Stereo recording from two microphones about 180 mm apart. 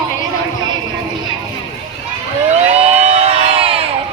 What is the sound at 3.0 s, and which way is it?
Crowd, 35° right (ahead or behind).